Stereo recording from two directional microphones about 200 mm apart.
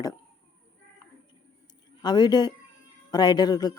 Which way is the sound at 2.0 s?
20° left (ahead or behind).